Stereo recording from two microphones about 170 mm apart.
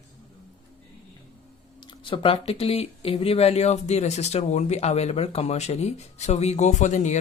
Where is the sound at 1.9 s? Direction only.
30° left (ahead or behind).